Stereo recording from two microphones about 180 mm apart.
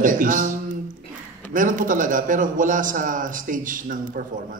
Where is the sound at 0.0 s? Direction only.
50° right (ahead or behind).